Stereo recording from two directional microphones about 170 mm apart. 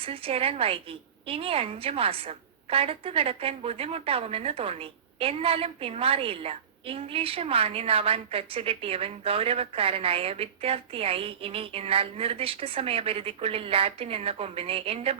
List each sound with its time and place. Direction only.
0.0 s a woman's voice: 35° right (ahead or behind)